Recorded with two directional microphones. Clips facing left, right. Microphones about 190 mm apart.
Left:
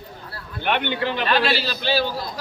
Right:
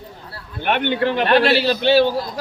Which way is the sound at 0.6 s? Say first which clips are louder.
Right 4 dB; 50° right (ahead or behind).